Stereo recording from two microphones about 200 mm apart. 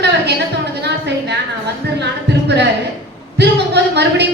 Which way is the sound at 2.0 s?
60° right (ahead or behind).